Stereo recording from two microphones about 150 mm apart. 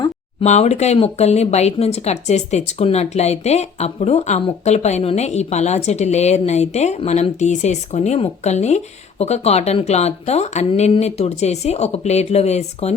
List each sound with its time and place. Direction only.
0.4 s speech: 45° left (ahead or behind)